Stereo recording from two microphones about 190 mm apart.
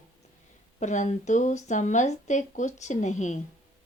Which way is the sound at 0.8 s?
40° left (ahead or behind).